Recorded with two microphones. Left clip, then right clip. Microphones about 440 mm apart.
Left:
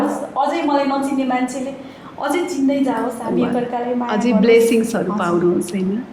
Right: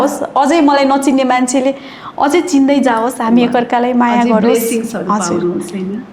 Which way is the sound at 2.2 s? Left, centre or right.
Right.